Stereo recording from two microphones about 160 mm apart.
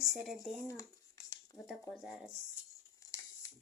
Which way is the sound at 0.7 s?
20° left (ahead or behind).